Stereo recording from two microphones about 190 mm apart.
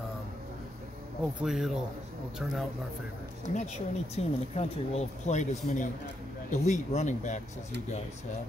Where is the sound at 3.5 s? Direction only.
35° left (ahead or behind).